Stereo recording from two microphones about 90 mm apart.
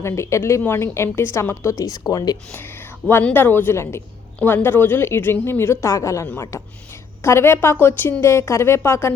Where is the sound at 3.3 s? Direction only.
25° left (ahead or behind).